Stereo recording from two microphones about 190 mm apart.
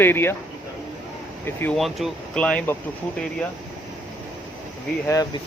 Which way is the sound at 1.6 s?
5° left (ahead or behind).